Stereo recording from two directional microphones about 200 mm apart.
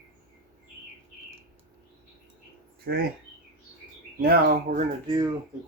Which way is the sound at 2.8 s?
50° right (ahead or behind).